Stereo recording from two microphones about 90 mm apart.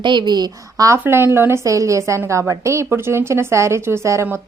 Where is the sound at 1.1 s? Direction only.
25° right (ahead or behind).